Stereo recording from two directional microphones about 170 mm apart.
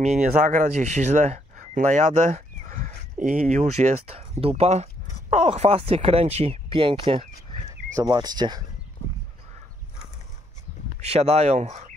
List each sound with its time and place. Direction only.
0.0 s speech: 45° right (ahead or behind); by 8.6 s 25° right (ahead or behind)
11.0 s speech: 40° right (ahead or behind)